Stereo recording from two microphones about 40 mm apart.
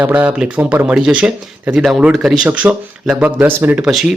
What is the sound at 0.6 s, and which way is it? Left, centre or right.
Speech, right.